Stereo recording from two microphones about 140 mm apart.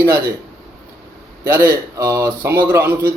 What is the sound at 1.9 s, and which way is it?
A man's voice, 25° right (ahead or behind).